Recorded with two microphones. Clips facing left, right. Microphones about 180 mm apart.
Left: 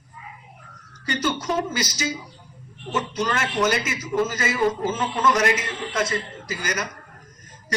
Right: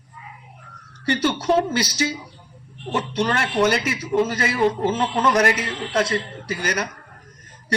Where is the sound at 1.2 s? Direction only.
30° right (ahead or behind).